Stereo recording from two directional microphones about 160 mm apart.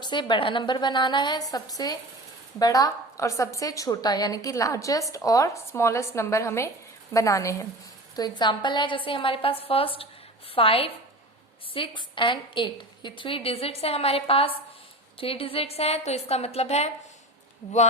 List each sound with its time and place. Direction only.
0.0 s a woman's voice: 30° left (ahead or behind)